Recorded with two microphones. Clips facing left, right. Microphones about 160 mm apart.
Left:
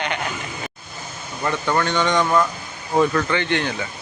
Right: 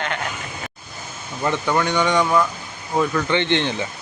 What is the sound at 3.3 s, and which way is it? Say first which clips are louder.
Speech: right 2 dB; 25° right (ahead or behind).